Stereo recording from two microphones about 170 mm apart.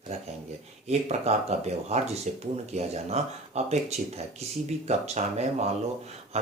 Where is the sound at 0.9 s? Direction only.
40° right (ahead or behind).